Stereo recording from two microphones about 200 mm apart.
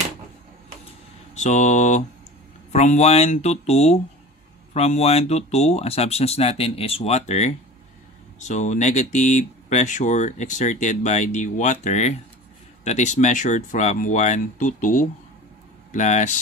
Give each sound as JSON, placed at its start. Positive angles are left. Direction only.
{"t": 1.3, "sound": "mantra", "side_deg": 35}
{"t": 2.7, "sound": "speech", "side_deg": 35}